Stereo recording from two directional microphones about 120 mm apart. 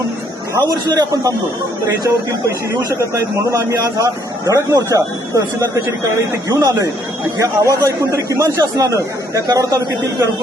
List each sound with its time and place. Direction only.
0.7 s a man's voice: 30° right (ahead or behind)